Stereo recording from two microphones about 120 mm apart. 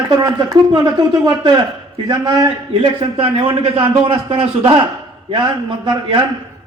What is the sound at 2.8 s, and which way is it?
A man's voice, 50° right (ahead or behind).